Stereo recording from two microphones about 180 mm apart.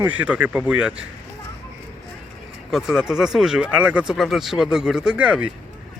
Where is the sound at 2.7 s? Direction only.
5° right (ahead or behind).